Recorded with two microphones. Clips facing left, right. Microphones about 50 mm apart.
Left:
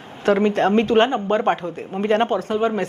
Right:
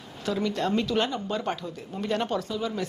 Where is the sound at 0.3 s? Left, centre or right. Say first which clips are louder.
Left 10 dB; left.